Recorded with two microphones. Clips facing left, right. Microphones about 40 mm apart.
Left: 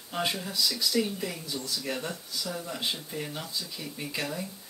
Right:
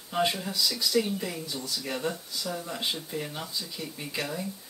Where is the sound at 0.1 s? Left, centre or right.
Centre.